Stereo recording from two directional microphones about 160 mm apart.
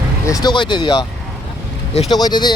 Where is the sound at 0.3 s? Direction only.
25° left (ahead or behind).